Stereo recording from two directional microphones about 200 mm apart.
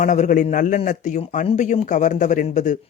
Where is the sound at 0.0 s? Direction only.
40° left (ahead or behind).